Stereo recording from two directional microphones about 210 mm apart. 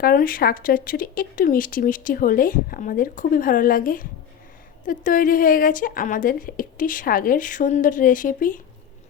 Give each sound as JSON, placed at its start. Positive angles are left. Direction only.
{"t": 0.0, "sound": "speech", "side_deg": 45}